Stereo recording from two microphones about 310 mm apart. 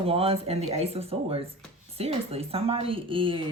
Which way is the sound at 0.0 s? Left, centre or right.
Centre.